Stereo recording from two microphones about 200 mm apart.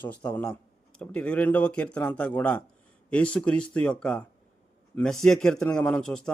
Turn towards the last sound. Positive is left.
turn(degrees=5)  # may be behind; listen again after turning